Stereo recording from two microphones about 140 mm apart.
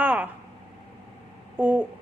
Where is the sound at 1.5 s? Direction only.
10° right (ahead or behind).